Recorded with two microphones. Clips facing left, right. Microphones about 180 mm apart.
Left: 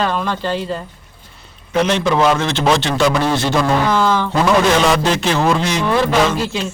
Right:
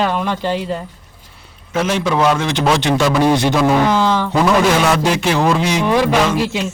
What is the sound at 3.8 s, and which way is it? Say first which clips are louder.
Speech: right 1 dB; 20° right (ahead or behind).